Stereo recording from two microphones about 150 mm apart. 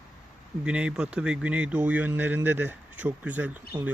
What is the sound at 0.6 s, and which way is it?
Speech, 5° right (ahead or behind).